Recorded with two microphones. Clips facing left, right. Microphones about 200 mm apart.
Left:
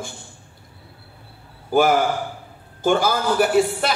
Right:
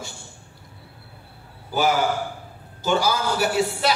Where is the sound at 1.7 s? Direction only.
50° left (ahead or behind).